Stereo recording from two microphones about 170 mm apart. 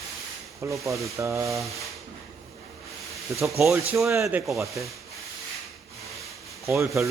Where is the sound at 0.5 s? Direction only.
20° right (ahead or behind).